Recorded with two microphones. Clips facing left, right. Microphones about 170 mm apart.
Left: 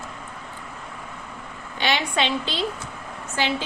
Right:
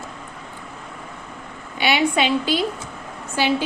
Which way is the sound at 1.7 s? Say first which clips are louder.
Right 5 dB; 10° right (ahead or behind).